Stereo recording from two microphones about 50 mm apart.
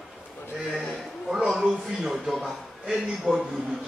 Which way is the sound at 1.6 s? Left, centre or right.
Centre.